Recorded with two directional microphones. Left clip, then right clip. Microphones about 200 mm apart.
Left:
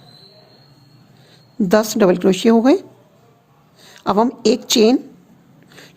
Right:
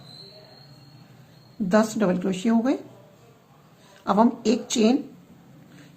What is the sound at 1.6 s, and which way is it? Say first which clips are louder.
Speech: left 8 dB; 55° left (ahead or behind).